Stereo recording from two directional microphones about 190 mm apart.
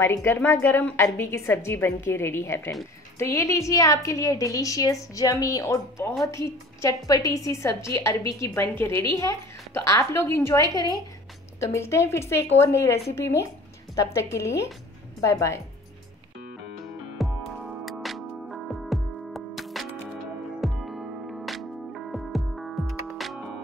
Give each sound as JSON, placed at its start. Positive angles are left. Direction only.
{"t": 0.0, "sound": "a woman's voice", "side_deg": 15}
{"t": 17.2, "sound": "music", "side_deg": 0}